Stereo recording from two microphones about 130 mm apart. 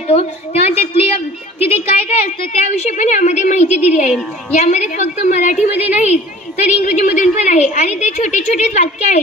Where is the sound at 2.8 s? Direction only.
65° left (ahead or behind).